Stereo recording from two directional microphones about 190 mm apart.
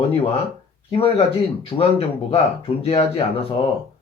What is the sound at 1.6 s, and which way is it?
Speech, 30° left (ahead or behind).